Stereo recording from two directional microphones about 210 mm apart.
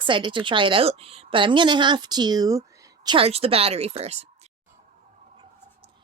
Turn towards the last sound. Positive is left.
turn(degrees=-30)  # may be behind; listen again after turning